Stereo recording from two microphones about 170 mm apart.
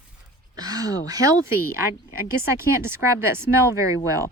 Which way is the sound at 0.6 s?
20° right (ahead or behind).